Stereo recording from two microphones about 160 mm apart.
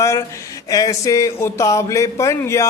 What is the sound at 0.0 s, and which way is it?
Speech, 20° left (ahead or behind).